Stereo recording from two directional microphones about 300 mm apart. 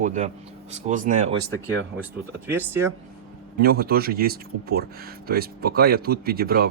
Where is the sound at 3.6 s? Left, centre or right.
Right.